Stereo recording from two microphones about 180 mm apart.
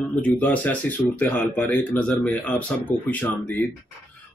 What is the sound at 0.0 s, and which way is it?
Speech, 10° left (ahead or behind).